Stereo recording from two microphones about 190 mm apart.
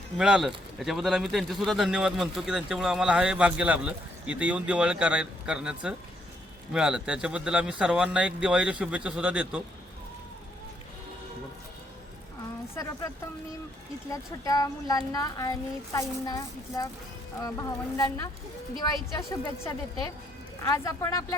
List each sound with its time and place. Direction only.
0.2 s speech: 5° right (ahead or behind)
12.7 s speech: 15° left (ahead or behind)
14.1 s a woman's voice: 20° left (ahead or behind)